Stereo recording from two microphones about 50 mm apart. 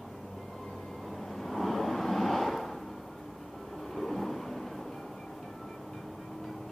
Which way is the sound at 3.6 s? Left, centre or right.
Centre.